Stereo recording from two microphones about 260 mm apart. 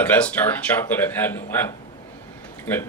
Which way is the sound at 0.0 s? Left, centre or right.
Centre.